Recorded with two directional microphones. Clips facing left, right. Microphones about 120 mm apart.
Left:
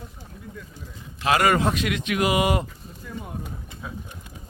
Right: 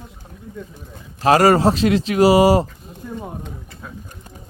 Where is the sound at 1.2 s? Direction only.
35° right (ahead or behind).